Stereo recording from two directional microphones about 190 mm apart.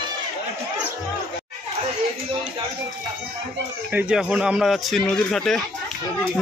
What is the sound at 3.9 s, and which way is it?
Speech, 5° right (ahead or behind).